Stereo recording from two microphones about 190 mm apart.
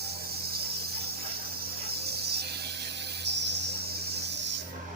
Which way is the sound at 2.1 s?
60° right (ahead or behind).